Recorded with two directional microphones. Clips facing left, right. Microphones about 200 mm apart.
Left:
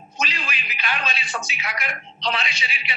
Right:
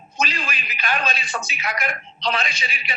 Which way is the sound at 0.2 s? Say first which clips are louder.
Right 3 dB; 45° right (ahead or behind).